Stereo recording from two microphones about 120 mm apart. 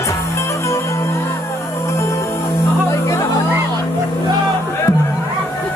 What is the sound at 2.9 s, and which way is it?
Music, 25° left (ahead or behind).